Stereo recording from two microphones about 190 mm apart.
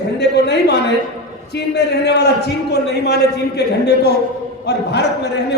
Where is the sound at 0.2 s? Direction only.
60° left (ahead or behind).